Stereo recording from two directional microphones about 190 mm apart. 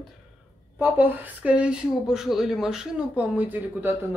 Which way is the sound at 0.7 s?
10° right (ahead or behind).